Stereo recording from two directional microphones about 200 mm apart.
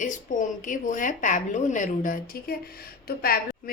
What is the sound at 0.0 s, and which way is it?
A woman's voice, 40° left (ahead or behind).